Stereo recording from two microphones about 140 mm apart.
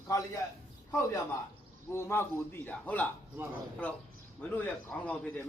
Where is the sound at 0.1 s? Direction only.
25° left (ahead or behind).